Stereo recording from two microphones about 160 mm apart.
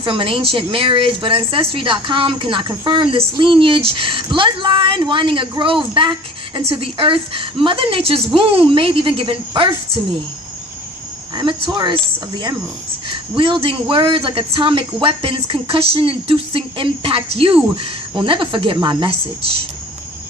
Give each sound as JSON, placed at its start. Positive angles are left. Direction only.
{"t": 0.0, "sound": "a woman's voice", "side_deg": -35}
{"t": 11.3, "sound": "speech", "side_deg": -30}
{"t": 13.3, "sound": "a woman's voice", "side_deg": -30}